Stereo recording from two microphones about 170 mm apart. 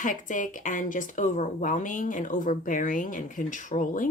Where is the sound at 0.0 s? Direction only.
50° left (ahead or behind).